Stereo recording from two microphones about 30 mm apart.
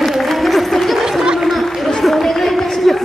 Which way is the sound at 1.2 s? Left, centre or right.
Right.